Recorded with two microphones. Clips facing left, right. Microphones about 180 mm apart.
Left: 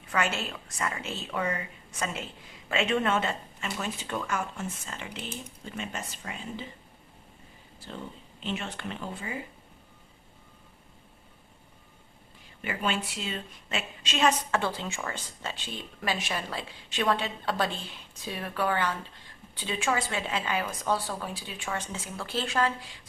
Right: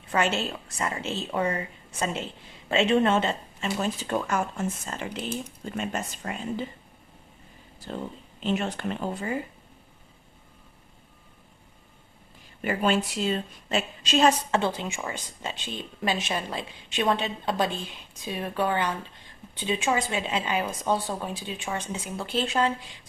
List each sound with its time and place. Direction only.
0.1 s speech: 25° right (ahead or behind); by 6.7 s 50° right (ahead or behind)
7.9 s speech: 45° right (ahead or behind)
12.6 s speech: 40° right (ahead or behind)
14.5 s speech: 20° right (ahead or behind)